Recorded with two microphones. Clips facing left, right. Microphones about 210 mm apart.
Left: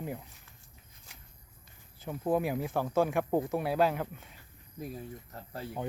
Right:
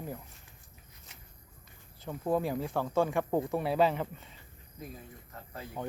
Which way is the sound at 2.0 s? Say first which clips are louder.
Left 1 dB; 10° left (ahead or behind).